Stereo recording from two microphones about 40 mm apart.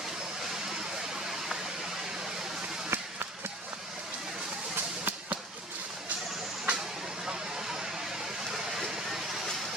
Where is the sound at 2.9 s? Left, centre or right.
Right.